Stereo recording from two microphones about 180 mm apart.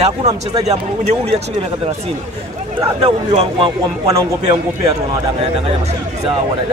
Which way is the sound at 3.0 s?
30° right (ahead or behind).